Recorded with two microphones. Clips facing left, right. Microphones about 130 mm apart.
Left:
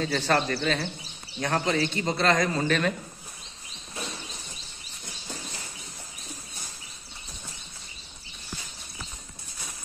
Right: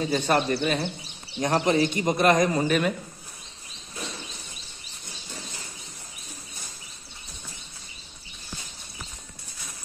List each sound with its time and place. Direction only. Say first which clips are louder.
0.0 s speech: right 2 dB; 15° right (ahead or behind)